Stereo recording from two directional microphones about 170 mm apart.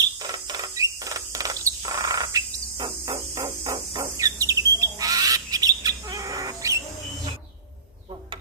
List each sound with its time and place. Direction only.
0.2 s rodents: 25° right (ahead or behind)
4.0 s bird: 20° right (ahead or behind)